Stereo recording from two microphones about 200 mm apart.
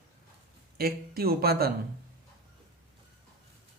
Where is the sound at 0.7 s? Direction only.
50° right (ahead or behind).